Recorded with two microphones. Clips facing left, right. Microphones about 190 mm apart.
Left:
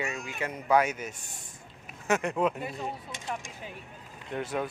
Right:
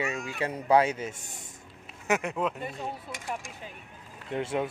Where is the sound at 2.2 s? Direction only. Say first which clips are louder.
Left 2 dB; centre (ahead or behind).